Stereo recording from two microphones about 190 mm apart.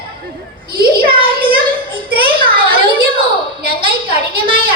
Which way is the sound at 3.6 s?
55° right (ahead or behind).